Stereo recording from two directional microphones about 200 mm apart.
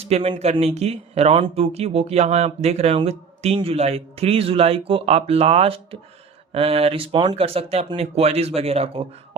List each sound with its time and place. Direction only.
0.0 s speech: 30° right (ahead or behind)